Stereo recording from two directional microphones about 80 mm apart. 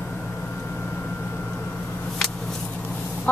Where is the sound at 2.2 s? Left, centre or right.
Centre.